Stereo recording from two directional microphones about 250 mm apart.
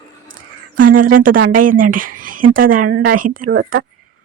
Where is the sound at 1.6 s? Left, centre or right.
Right.